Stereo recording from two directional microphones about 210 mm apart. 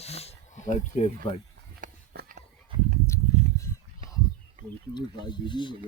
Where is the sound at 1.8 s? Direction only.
40° right (ahead or behind).